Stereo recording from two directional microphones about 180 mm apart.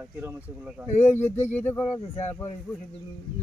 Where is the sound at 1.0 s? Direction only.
15° left (ahead or behind).